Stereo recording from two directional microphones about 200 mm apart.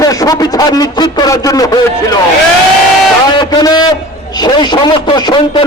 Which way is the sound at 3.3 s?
20° left (ahead or behind).